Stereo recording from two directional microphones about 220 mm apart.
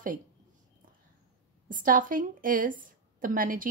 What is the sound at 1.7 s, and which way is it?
A woman's voice, 40° right (ahead or behind).